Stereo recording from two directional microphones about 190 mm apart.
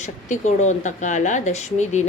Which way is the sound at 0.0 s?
40° left (ahead or behind).